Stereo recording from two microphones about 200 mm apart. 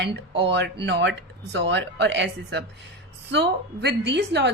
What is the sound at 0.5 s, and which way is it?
A woman's voice, 60° right (ahead or behind).